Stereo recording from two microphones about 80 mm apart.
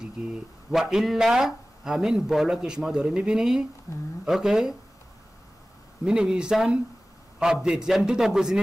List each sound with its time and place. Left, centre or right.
0.0 s speech: centre
3.9 s a woman's voice: left
4.3 s speech: centre
6.0 s speech: centre